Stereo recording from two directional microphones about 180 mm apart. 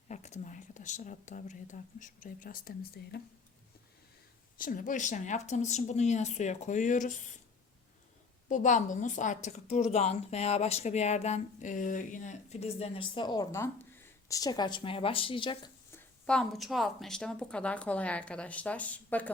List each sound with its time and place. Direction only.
0.1 s speech: 40° left (ahead or behind); by 3.2 s 55° left (ahead or behind)
4.5 s speech: 50° left (ahead or behind)
8.4 s speech: 45° left (ahead or behind); by 15.7 s 30° left (ahead or behind)
15.9 s a woman's voice: 5° left (ahead or behind)